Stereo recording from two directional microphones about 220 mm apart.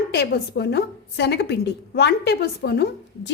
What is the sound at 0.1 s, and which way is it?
A woman's voice, 45° left (ahead or behind).